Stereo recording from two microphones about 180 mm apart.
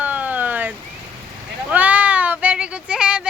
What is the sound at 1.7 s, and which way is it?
Speech, 10° right (ahead or behind).